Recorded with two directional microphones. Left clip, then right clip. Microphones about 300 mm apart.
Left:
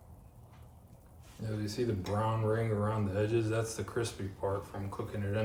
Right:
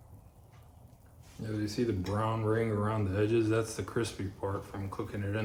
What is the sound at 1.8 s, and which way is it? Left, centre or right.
A man's voice, right.